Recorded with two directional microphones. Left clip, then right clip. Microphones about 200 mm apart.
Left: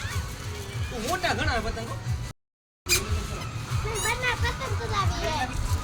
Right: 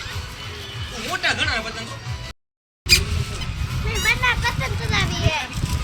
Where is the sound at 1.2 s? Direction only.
50° left (ahead or behind).